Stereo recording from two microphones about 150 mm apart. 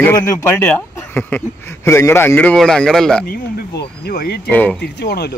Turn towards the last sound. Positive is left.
turn(degrees=90)